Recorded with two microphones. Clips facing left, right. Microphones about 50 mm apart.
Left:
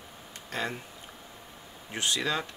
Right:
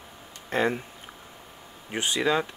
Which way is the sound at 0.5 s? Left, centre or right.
Right.